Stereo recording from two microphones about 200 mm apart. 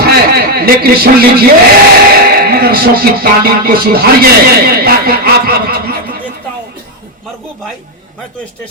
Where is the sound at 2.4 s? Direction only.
50° right (ahead or behind).